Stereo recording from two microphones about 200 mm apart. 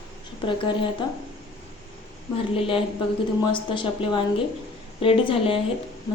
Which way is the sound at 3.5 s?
25° left (ahead or behind).